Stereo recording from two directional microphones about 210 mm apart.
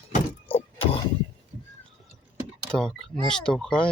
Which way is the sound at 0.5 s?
25° left (ahead or behind).